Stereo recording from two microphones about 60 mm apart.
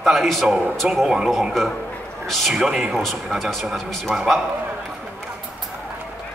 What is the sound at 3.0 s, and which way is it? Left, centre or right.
A man's voice, centre.